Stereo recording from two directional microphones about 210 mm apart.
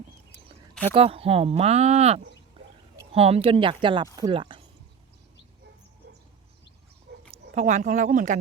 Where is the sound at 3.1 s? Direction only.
30° right (ahead or behind).